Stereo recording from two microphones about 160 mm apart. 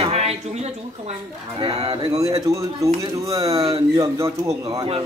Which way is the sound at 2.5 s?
20° right (ahead or behind).